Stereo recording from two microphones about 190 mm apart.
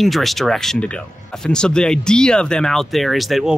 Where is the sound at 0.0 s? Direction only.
Centre (ahead or behind).